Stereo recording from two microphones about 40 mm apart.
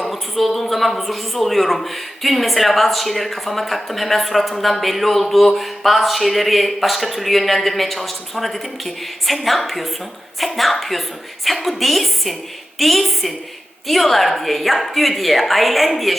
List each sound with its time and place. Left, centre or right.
0.1 s a woman's voice: centre